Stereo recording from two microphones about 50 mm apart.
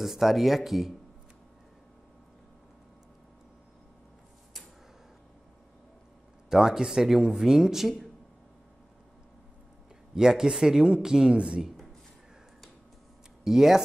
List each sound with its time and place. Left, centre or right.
0.0 s speech: centre
6.5 s speech: centre
10.1 s speech: centre
13.4 s speech: centre